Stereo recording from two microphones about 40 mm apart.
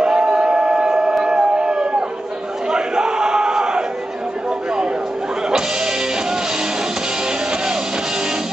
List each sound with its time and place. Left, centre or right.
0.0 s a sound: centre
2.7 s battle cry: centre
5.5 s music: centre